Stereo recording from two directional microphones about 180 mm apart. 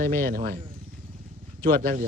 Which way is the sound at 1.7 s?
45° right (ahead or behind).